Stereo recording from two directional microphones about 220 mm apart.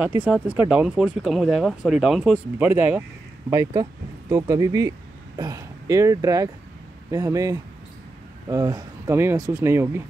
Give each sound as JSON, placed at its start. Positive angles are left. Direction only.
{"t": 0.0, "sound": "speech", "side_deg": -5}